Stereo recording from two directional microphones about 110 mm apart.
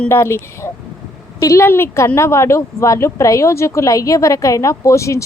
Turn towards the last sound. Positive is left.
turn(degrees=25)  # may be behind; listen again after turning